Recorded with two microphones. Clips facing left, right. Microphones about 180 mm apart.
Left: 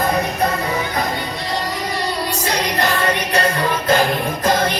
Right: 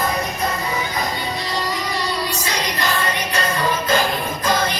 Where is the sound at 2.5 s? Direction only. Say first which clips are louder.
Left 5 dB; 60° left (ahead or behind).